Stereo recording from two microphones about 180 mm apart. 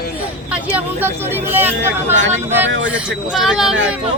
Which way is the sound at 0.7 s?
10° right (ahead or behind).